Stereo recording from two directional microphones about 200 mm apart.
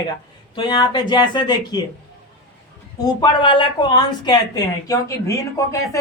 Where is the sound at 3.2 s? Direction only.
25° left (ahead or behind).